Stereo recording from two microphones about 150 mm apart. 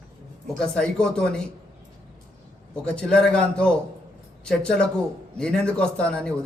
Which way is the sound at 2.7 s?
5° left (ahead or behind).